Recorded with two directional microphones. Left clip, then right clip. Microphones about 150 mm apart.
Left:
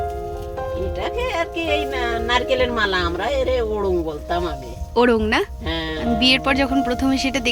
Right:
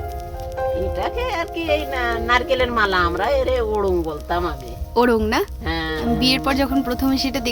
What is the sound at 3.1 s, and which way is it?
Speech, 25° left (ahead or behind).